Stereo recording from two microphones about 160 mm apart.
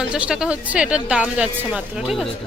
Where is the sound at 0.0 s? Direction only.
5° right (ahead or behind).